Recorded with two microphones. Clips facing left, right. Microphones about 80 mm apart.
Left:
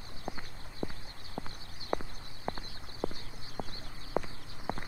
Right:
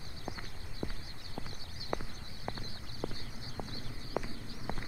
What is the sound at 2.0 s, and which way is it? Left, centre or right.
Clip-clop, left.